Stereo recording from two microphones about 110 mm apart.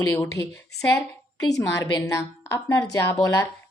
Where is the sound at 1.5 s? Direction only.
30° left (ahead or behind).